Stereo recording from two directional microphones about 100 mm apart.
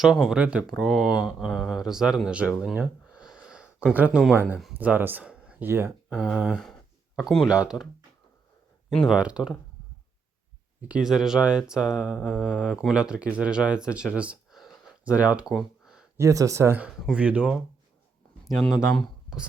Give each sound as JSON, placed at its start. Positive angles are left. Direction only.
{"t": 0.0, "sound": "speech", "side_deg": -5}
{"t": 2.7, "sound": "a sound", "side_deg": -10}
{"t": 4.4, "sound": "speech", "side_deg": -15}
{"t": 6.3, "sound": "speech", "side_deg": 0}
{"t": 8.9, "sound": "speech", "side_deg": 5}
{"t": 9.1, "sound": "speech", "side_deg": -10}
{"t": 10.8, "sound": "speech", "side_deg": -10}
{"t": 12.1, "sound": "mantra", "side_deg": 10}
{"t": 12.7, "sound": "speech", "side_deg": -10}
{"t": 15.5, "sound": "a sound", "side_deg": -5}
{"t": 16.1, "sound": "speech", "side_deg": -30}
{"t": 17.1, "sound": "speech", "side_deg": -15}
{"t": 18.6, "sound": "speech", "side_deg": 5}